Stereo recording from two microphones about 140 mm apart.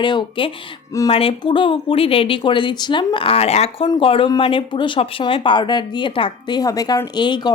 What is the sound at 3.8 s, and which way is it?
Speech, 40° left (ahead or behind).